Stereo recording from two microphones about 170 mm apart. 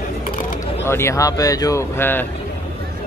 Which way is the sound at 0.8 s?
15° left (ahead or behind).